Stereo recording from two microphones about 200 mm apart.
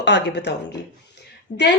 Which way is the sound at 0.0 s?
60° left (ahead or behind).